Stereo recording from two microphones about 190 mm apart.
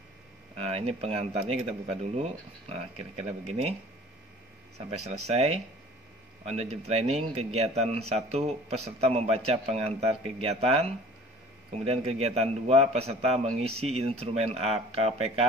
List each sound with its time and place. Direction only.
0.6 s speech: 35° right (ahead or behind)
4.7 s speech: 35° right (ahead or behind)